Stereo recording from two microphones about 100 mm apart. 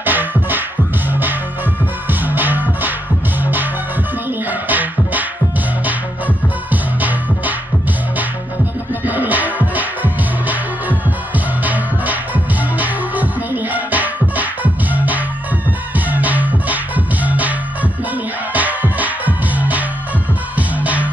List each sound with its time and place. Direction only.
0.0 s music: 20° right (ahead or behind)
2.0 s music: 20° right (ahead or behind)
4.5 s music: 15° right (ahead or behind)
9.0 s music: 15° right (ahead or behind)